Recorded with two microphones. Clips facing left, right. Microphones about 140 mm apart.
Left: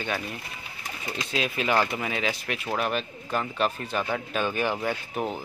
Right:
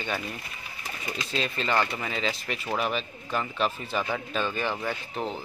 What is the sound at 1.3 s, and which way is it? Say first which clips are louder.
Speech: left 2 dB; 5° left (ahead or behind).